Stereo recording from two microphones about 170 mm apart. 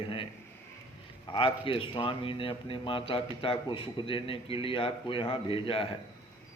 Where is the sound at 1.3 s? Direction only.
30° left (ahead or behind).